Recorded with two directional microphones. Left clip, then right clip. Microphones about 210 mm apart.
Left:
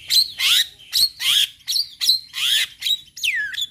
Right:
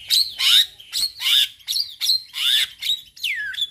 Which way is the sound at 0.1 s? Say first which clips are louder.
Right 1 dB; 15° left (ahead or behind).